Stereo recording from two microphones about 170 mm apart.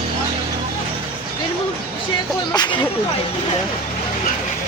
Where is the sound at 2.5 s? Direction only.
25° left (ahead or behind).